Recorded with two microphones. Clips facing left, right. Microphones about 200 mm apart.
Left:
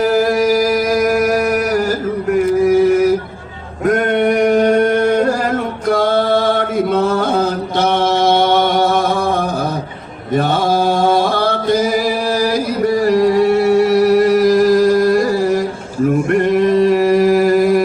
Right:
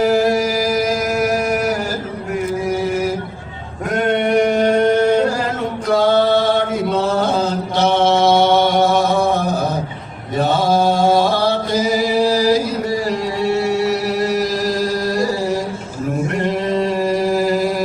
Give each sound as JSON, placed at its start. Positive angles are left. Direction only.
{"t": 1.0, "sound": "music", "side_deg": 55}
{"t": 3.8, "sound": "male singing", "side_deg": 50}
{"t": 5.9, "sound": "a sound", "side_deg": 50}
{"t": 7.1, "sound": "mantra", "side_deg": 50}
{"t": 11.4, "sound": "chant", "side_deg": 55}
{"t": 13.1, "sound": "chant", "side_deg": 55}
{"t": 16.3, "sound": "a sound", "side_deg": 55}